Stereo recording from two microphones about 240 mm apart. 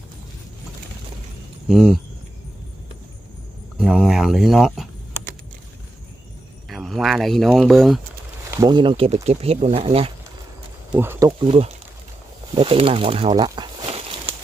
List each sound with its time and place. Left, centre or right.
1.6 s speech: centre
3.8 s speech: centre
6.7 s speech: centre
8.4 s speech: centre
10.9 s speech: centre
11.3 s speech: right